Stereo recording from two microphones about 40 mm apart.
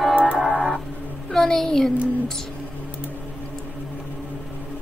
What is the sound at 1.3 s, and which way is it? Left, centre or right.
Speech, centre.